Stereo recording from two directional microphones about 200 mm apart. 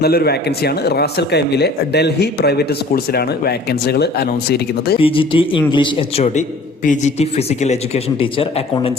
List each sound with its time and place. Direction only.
0.0 s speech: 50° left (ahead or behind)
4.9 s a man's voice: 25° left (ahead or behind)